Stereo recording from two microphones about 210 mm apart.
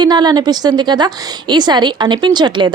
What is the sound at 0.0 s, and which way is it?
Speech, 20° right (ahead or behind).